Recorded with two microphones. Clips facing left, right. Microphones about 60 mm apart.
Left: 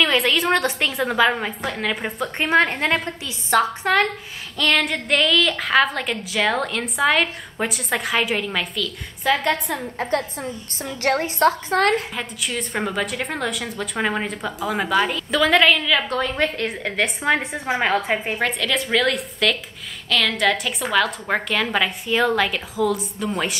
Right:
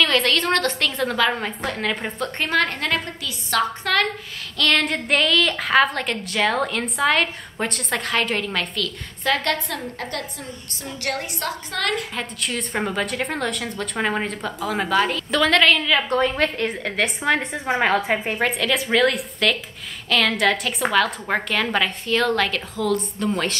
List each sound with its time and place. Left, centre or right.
0.0 s a woman's voice: centre
4.6 s a woman's voice: centre
11.0 s a woman's voice: left
12.2 s a woman's voice: centre